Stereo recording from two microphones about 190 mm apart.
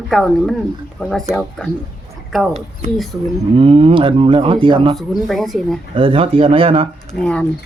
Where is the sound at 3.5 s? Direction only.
30° right (ahead or behind).